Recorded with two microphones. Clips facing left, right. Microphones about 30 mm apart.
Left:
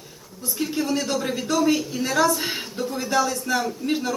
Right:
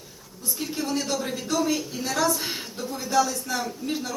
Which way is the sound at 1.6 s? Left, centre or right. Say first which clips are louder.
Left 5 dB; left.